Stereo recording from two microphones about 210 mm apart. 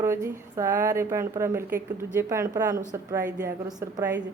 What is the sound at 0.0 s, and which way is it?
Speech, 15° right (ahead or behind).